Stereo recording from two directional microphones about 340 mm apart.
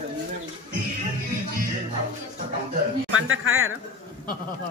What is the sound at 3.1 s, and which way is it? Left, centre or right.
Speech, right.